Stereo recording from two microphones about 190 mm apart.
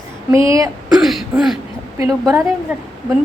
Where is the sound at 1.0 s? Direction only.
Centre (ahead or behind).